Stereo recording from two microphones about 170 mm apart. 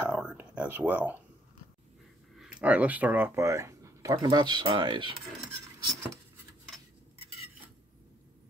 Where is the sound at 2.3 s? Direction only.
5° right (ahead or behind); by 5.2 s 30° right (ahead or behind).